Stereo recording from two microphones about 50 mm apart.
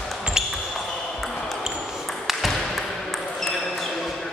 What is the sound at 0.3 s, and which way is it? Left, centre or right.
Basketball bounce, centre.